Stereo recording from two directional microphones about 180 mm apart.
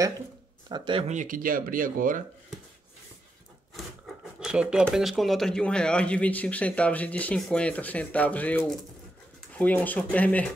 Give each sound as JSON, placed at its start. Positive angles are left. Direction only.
{"t": 0.7, "sound": "speech", "side_deg": -25}
{"t": 1.0, "sound": "speech", "side_deg": -45}
{"t": 4.4, "sound": "speech", "side_deg": -5}